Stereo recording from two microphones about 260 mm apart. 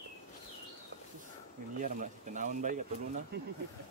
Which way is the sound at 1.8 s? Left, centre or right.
Right.